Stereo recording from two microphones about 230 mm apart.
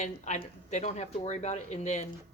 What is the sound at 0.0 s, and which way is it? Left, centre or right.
Speech, left.